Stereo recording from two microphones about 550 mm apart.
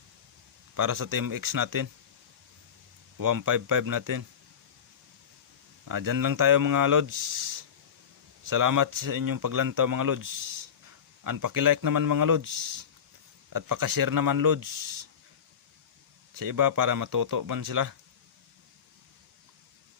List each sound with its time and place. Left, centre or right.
0.8 s speech: right
3.2 s speech: right
5.8 s speech: right
16.3 s speech: right